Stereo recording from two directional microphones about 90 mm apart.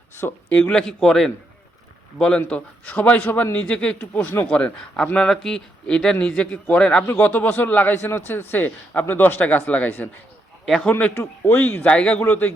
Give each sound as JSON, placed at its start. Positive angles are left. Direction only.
{"t": 0.2, "sound": "a man's voice", "side_deg": 25}
{"t": 0.7, "sound": "a man's voice", "side_deg": 10}
{"t": 11.1, "sound": "a man's voice", "side_deg": 30}
{"t": 11.8, "sound": "speech", "side_deg": 10}
{"t": 12.2, "sound": "a man's voice", "side_deg": 25}